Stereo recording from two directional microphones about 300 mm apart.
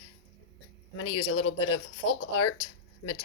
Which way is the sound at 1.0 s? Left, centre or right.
Left.